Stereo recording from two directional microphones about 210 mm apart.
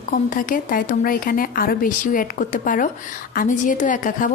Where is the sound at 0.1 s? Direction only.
40° left (ahead or behind).